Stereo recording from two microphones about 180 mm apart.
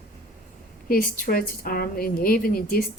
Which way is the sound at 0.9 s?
50° left (ahead or behind).